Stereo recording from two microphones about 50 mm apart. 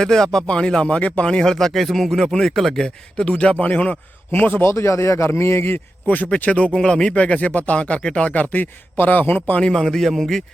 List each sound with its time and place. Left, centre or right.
0.0 s speech: centre
2.8 s speech: centre
4.3 s a man's voice: left
4.6 s speech: left
6.1 s a man's voice: left
6.7 s speech: centre; by 9.6 s left
9.6 s speech: centre
9.8 s speech: centre